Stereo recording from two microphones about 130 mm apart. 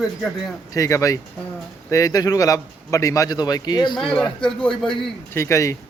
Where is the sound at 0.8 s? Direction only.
25° left (ahead or behind).